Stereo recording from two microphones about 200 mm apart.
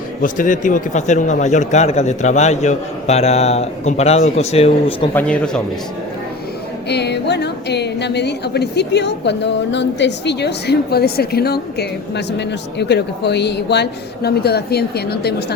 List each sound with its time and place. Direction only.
0.2 s a man's voice: 40° left (ahead or behind)
5.1 s speech: 5° left (ahead or behind)
6.8 s a woman's voice: 55° left (ahead or behind)